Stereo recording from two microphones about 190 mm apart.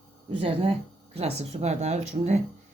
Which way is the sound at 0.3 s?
25° right (ahead or behind).